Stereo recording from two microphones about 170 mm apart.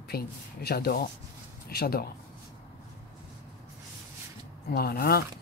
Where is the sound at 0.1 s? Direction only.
65° left (ahead or behind).